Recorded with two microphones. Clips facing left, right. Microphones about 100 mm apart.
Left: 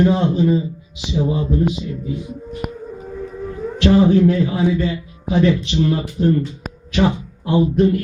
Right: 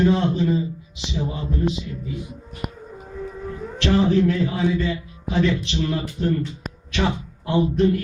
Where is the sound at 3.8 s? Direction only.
15° left (ahead or behind).